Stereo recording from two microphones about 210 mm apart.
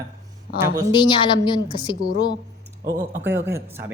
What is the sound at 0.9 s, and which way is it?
Speech, 25° left (ahead or behind).